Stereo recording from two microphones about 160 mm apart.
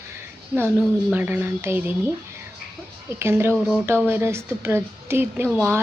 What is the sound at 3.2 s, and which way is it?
A woman's voice, 15° right (ahead or behind).